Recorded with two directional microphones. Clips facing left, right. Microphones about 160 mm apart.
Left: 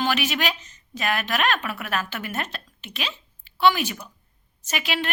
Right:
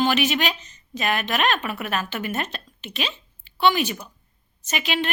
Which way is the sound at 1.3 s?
20° right (ahead or behind).